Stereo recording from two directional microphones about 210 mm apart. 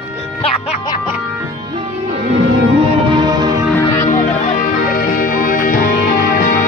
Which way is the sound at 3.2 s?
20° right (ahead or behind).